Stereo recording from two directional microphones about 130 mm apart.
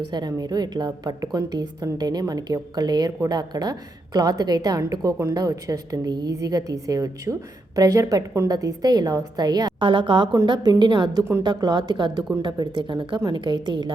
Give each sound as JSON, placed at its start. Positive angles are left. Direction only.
{"t": 0.1, "sound": "a woman's voice", "side_deg": -30}